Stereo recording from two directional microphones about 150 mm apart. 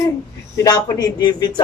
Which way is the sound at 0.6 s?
25° left (ahead or behind).